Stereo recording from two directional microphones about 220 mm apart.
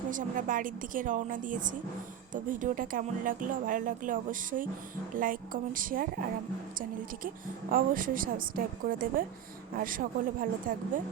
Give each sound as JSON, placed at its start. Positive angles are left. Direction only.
{"t": 0.1, "sound": "speech", "side_deg": -35}
{"t": 7.7, "sound": "speech", "side_deg": -40}